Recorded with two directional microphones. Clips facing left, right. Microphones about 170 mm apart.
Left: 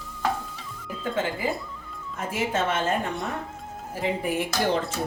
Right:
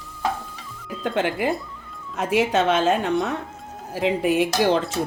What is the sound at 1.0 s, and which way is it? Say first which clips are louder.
A woman's voice: right 5 dB; 70° right (ahead or behind).